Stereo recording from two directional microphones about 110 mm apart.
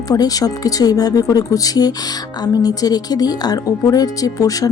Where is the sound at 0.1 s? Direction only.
35° left (ahead or behind).